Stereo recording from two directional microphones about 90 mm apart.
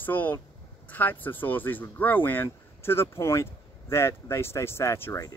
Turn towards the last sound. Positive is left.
turn(degrees=30)  # may be behind; listen again after turning